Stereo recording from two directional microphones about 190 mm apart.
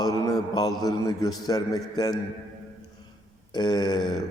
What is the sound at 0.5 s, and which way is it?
A man's voice, 20° left (ahead or behind).